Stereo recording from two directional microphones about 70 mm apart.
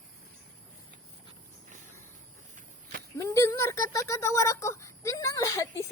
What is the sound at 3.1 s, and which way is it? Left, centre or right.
A woman's voice, left.